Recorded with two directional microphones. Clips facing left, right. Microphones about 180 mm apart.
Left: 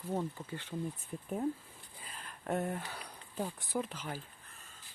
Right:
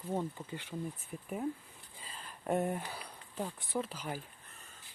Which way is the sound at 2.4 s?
15° right (ahead or behind).